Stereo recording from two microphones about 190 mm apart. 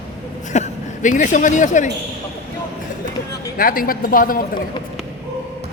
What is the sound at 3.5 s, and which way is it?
A man's voice, 50° left (ahead or behind).